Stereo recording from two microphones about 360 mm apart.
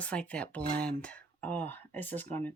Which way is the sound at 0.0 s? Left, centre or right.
Centre.